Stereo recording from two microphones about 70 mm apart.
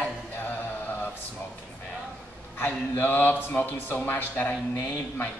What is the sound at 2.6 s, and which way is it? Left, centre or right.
A man's voice, left.